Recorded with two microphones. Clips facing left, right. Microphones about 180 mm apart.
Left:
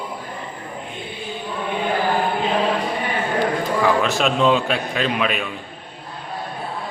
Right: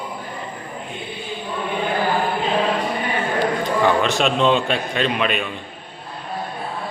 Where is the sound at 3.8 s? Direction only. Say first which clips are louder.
Right 1 dB; centre (ahead or behind).